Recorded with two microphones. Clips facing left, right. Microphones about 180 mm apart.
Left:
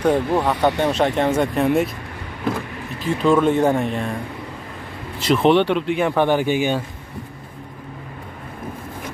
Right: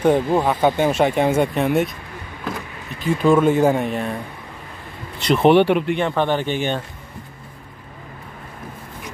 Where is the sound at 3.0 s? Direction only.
5° right (ahead or behind).